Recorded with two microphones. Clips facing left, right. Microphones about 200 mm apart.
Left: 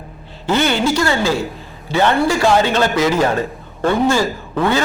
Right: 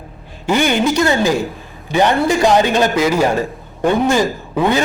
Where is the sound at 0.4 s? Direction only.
15° right (ahead or behind).